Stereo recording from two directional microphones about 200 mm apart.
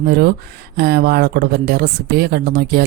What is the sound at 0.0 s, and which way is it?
Speech, 50° right (ahead or behind).